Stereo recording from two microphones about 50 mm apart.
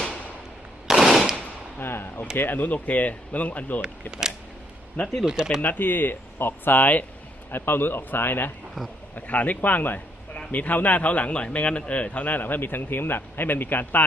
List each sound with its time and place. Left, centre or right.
0.9 s machine gun: centre
1.8 s speech: left
5.2 s speech: centre
5.6 s speech: left
9.1 s speech: left